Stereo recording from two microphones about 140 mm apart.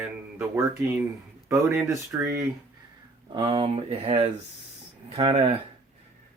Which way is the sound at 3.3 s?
25° right (ahead or behind).